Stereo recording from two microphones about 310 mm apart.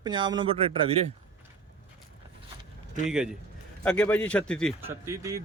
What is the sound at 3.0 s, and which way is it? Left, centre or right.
A man's voice, centre.